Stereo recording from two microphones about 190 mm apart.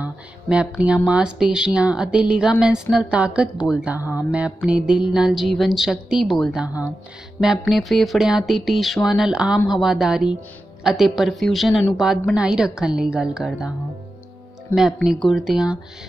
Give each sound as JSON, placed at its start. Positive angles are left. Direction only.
{"t": 0.0, "sound": "speech", "side_deg": -5}
{"t": 4.0, "sound": "music", "side_deg": 15}
{"t": 4.3, "sound": "speech", "side_deg": -5}
{"t": 14.7, "sound": "music", "side_deg": 15}
{"t": 15.0, "sound": "speech", "side_deg": 0}